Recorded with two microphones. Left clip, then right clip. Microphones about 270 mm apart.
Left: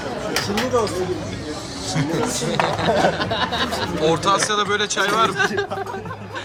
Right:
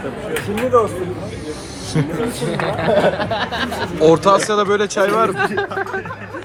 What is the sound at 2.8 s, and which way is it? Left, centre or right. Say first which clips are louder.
Speech: right 6 dB; right.